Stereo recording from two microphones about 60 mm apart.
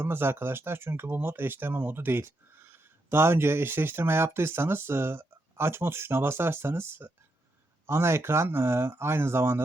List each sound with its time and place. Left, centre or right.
0.0 s speech: right